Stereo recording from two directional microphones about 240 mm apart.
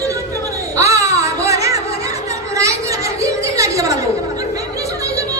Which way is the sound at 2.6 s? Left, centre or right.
Centre.